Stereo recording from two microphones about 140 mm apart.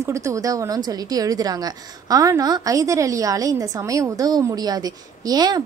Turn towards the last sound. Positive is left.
turn(degrees=-30)  # may be behind; listen again after turning